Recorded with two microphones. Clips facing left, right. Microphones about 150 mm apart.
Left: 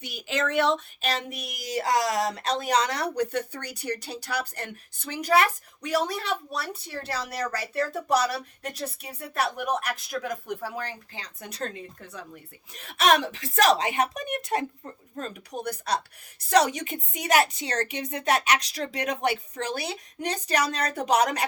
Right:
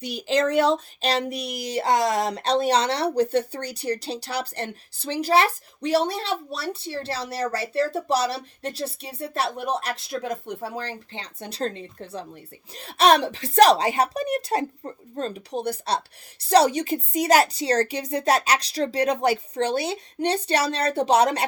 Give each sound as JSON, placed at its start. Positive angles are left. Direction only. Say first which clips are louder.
{"t": 0.0, "sound": "speech", "louder": "right 7 dB", "side_deg": -35}